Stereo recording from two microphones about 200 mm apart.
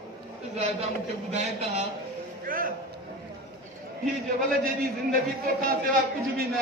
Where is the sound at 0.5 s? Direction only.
30° right (ahead or behind).